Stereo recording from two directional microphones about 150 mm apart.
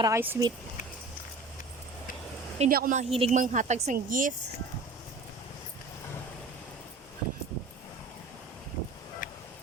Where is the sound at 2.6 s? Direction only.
70° right (ahead or behind).